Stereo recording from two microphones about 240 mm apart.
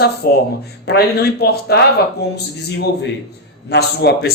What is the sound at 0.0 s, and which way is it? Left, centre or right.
Speech, left.